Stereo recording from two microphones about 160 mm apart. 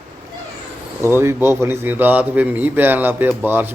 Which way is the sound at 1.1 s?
15° right (ahead or behind).